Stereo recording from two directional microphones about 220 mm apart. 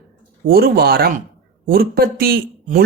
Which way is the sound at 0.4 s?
45° right (ahead or behind).